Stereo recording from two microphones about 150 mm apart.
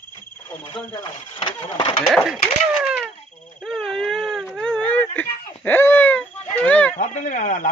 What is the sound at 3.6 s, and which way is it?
Baby cry, centre (ahead or behind).